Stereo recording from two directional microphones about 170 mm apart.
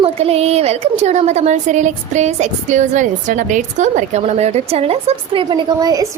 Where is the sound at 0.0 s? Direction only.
35° right (ahead or behind).